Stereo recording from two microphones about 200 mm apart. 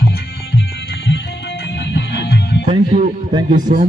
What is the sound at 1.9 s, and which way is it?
Music, 55° left (ahead or behind).